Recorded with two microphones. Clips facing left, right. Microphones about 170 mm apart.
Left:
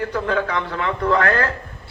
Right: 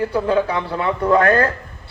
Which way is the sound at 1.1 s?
30° right (ahead or behind).